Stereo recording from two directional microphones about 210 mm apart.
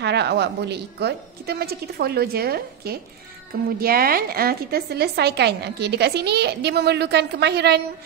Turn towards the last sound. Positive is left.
turn(degrees=-50)  # may be behind; listen again after turning